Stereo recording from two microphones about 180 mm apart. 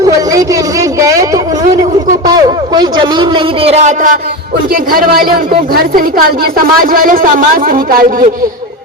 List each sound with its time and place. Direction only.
2.2 s a man's voice: 20° right (ahead or behind); by 4.2 s 45° right (ahead or behind)
4.7 s a woman's voice: 55° right (ahead or behind)